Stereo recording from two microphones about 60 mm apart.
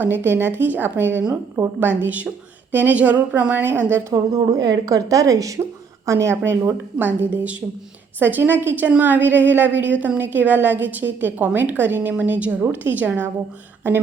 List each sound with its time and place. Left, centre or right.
0.0 s a woman's voice: right
4.1 s a woman's voice: right
6.1 s speech: right
7.0 s a woman's voice: right